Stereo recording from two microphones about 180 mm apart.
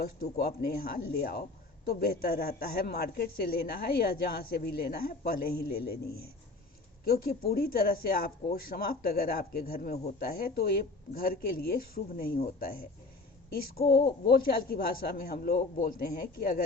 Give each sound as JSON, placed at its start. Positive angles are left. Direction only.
{"t": 0.0, "sound": "a man's voice", "side_deg": 60}